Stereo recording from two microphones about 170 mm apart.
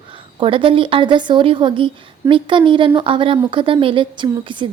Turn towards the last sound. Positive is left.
turn(degrees=-30)  # may be behind; listen again after turning